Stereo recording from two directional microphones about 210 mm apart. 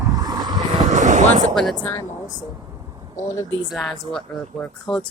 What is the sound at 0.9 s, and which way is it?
Vehicle, 35° right (ahead or behind).